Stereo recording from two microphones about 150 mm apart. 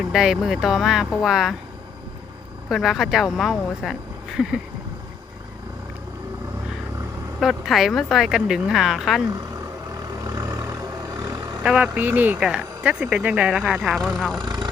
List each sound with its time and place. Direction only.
0.1 s speech: 5° right (ahead or behind)
2.6 s speech: centre (ahead or behind)
7.3 s speech: centre (ahead or behind)
10.2 s vehicle: 20° right (ahead or behind)
11.6 s speech: 5° right (ahead or behind)